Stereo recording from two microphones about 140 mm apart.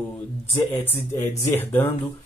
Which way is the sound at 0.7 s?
15° left (ahead or behind).